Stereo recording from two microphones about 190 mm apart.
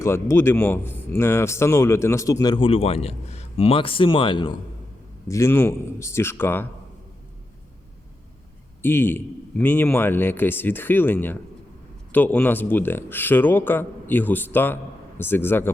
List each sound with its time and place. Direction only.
0.0 s speech: 15° left (ahead or behind)
5.3 s speech: 15° left (ahead or behind)
8.8 s speech: 10° left (ahead or behind)